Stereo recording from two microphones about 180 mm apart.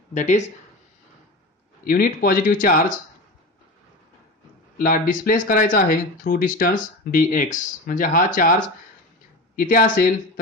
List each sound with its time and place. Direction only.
0.1 s speech: 40° left (ahead or behind)
1.9 s speech: 50° left (ahead or behind)
4.7 s speech: 50° left (ahead or behind)